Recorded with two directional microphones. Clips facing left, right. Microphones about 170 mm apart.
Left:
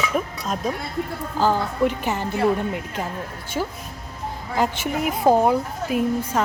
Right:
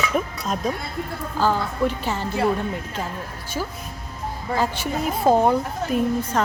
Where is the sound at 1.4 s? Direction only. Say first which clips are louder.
Left 1 dB; 15° left (ahead or behind).